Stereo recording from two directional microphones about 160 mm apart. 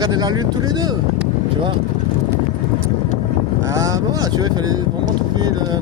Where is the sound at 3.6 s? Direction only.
20° right (ahead or behind).